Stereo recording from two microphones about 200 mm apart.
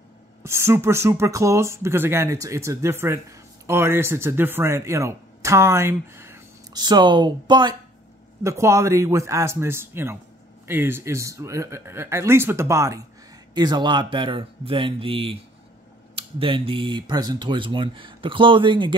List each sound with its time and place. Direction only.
0.4 s speech: 15° right (ahead or behind)